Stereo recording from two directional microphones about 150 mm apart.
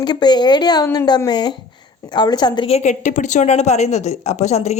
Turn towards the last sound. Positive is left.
turn(degrees=45)  # may be behind; listen again after turning